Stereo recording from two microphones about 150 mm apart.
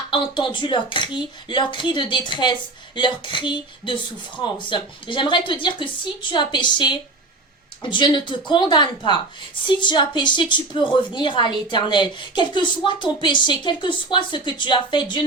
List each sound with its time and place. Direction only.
0.1 s speech: 35° left (ahead or behind)